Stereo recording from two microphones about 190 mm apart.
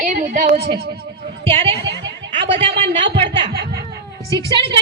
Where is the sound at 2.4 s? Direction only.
30° right (ahead or behind).